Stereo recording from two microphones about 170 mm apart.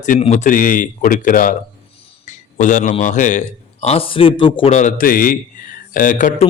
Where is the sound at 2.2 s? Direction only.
50° left (ahead or behind).